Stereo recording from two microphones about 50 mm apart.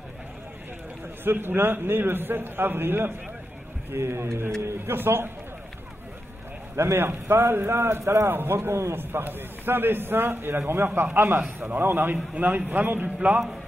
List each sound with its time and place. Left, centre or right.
1.2 s a man's voice: right
6.8 s speech: right
7.1 s a man's voice: right
8.3 s a man's voice: right